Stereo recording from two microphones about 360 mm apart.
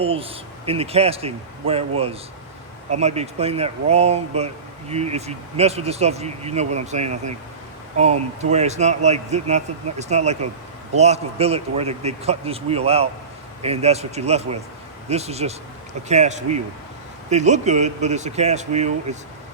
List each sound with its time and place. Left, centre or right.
0.0 s speech: centre
2.9 s speech: centre